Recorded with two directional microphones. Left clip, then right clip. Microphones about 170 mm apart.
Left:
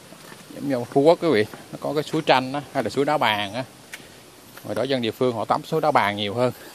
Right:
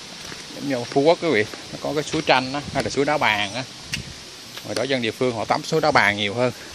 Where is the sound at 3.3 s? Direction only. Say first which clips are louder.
Right 2 dB; 55° left (ahead or behind).